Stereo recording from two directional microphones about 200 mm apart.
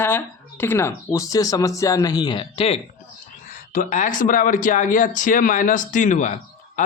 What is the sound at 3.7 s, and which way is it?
Speech, 40° left (ahead or behind).